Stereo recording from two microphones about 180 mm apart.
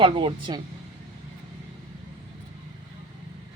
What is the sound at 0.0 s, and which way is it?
Speech, 25° right (ahead or behind).